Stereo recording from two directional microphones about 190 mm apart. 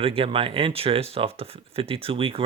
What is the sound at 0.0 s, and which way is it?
Speech, 30° right (ahead or behind).